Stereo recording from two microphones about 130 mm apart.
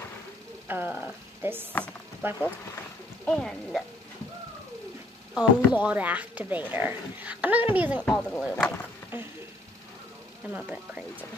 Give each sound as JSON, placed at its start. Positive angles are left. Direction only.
{"t": 0.7, "sound": "speech", "side_deg": -15}
{"t": 3.3, "sound": "speech", "side_deg": 5}
{"t": 5.3, "sound": "speech", "side_deg": -10}
{"t": 8.0, "sound": "speech", "side_deg": 5}
{"t": 10.5, "sound": "speech", "side_deg": -10}